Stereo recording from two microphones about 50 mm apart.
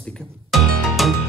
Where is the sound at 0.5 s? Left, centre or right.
Centre.